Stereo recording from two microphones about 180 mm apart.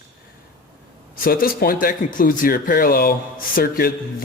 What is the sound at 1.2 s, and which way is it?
A man's voice, 55° left (ahead or behind).